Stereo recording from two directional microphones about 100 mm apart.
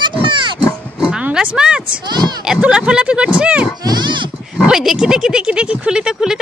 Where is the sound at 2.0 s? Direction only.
45° right (ahead or behind).